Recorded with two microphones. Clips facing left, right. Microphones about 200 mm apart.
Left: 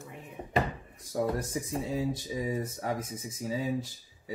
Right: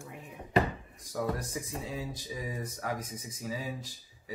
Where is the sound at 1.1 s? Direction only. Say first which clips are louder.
Left 3 dB; 30° left (ahead or behind).